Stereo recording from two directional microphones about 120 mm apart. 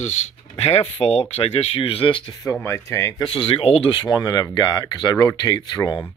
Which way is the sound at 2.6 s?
20° left (ahead or behind).